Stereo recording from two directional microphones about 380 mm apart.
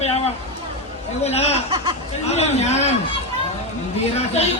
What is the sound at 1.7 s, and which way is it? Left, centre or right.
Speech, centre.